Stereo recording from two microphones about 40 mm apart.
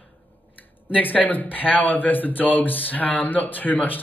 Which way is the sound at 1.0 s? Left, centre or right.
Left.